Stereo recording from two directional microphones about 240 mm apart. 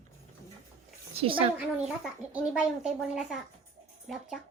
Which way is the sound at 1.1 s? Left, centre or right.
Right.